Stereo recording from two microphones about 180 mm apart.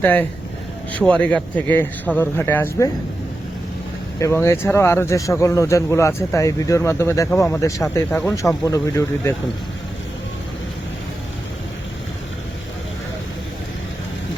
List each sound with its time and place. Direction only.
0.0 s speech: 10° left (ahead or behind)
4.2 s speech: 15° left (ahead or behind)